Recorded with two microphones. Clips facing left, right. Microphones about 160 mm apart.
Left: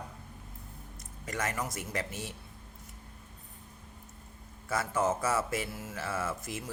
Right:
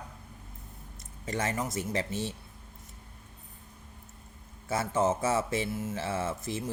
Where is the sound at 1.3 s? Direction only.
30° right (ahead or behind).